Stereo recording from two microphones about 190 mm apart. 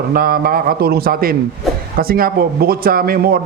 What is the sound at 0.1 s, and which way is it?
A man's voice, 50° right (ahead or behind).